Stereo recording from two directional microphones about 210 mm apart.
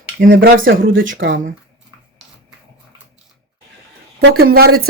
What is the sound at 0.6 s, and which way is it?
Speech, 65° right (ahead or behind).